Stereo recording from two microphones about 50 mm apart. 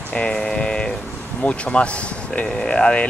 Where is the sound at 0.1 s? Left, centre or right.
Centre.